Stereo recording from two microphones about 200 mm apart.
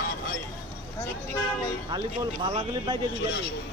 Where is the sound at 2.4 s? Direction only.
25° right (ahead or behind).